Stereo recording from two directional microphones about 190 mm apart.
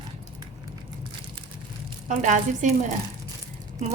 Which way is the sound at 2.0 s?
40° right (ahead or behind).